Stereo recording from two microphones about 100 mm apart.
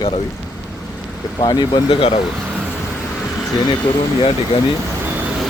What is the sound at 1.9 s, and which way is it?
Speech, 70° left (ahead or behind).